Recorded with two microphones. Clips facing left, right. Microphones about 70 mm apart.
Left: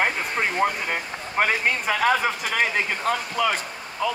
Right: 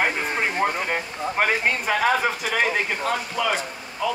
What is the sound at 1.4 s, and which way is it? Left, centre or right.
Speech, centre.